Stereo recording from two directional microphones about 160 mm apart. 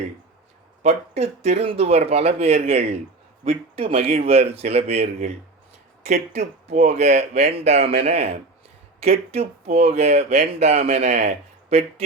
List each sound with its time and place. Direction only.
0.8 s speech: 45° right (ahead or behind)